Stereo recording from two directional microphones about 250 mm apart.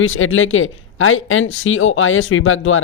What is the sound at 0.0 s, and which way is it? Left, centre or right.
Speech, left.